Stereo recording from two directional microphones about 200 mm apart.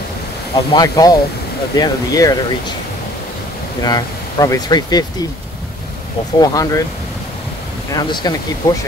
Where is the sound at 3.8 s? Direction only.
20° left (ahead or behind).